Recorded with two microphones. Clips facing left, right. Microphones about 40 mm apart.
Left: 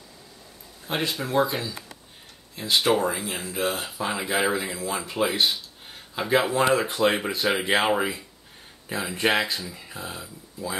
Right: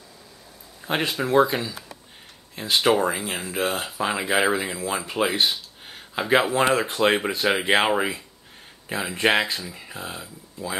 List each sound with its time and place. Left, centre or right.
0.8 s speech: right
1.1 s speech: centre
2.6 s speech: right
2.9 s speech: centre
5.0 s speech: right
6.7 s speech: centre